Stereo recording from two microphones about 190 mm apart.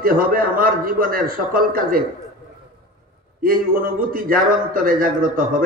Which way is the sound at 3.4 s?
50° right (ahead or behind).